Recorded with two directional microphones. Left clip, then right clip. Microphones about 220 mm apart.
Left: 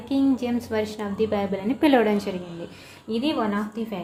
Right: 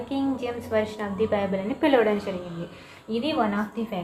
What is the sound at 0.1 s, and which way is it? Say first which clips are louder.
A woman's voice: left 6 dB; 40° left (ahead or behind).